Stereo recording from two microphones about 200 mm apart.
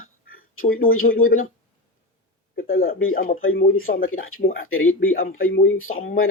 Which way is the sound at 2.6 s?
90° left.